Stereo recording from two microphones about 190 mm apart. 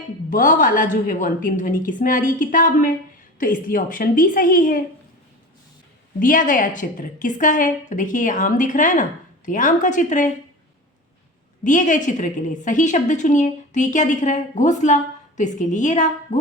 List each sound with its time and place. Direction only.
0.3 s a woman's voice: 45° left (ahead or behind)
6.1 s a woman's voice: 45° left (ahead or behind)
11.6 s a woman's voice: 40° left (ahead or behind)